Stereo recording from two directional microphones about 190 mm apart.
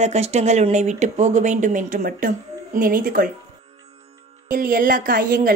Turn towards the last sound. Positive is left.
turn(degrees=-45)  # may be behind; listen again after turning